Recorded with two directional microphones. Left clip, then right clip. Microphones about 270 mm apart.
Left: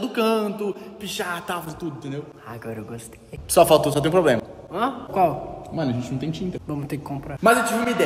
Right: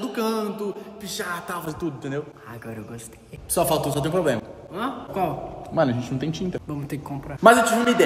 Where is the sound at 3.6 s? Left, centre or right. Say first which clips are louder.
Left 7 dB; centre.